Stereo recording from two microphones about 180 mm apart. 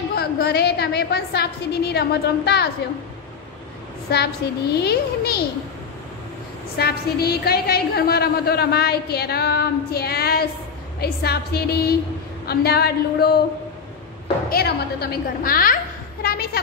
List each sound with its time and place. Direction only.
0.1 s a woman's voice: 60° left (ahead or behind)
4.4 s a woman's voice: 65° left (ahead or behind)
6.8 s a woman's voice: 60° left (ahead or behind)
14.5 s a woman's voice: 60° left (ahead or behind)